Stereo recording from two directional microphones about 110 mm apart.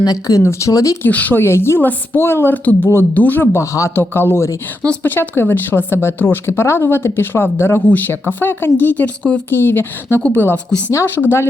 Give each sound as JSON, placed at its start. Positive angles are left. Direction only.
{"t": 0.0, "sound": "speech", "side_deg": 30}
{"t": 1.0, "sound": "a woman's voice", "side_deg": 15}